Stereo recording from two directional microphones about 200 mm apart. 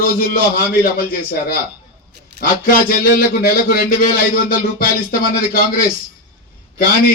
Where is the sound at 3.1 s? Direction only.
50° left (ahead or behind).